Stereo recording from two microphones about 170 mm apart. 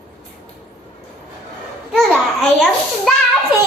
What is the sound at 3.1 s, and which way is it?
Children playing, 5° left (ahead or behind).